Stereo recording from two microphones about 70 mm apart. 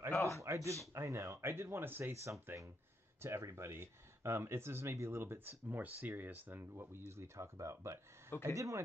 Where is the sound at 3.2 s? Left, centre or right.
Right.